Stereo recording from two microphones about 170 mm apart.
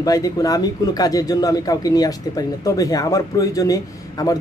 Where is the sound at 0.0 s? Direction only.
20° left (ahead or behind).